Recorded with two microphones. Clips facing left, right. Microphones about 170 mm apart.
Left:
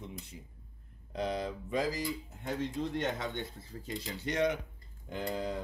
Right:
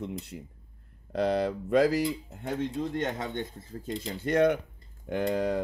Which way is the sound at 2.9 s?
45° right (ahead or behind).